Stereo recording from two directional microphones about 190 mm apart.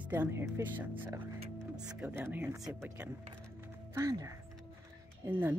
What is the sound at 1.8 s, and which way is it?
Speech, 10° right (ahead or behind).